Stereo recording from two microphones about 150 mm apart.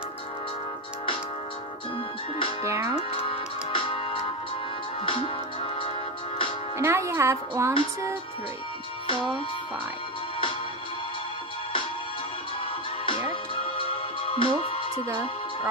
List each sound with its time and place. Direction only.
2.6 s music: 20° right (ahead or behind)
3.0 s music: 35° left (ahead or behind)
6.8 s music: 15° right (ahead or behind)
13.0 s music: 35° left (ahead or behind)